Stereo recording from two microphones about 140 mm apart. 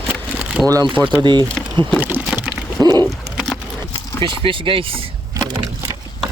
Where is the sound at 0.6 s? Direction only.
Centre (ahead or behind).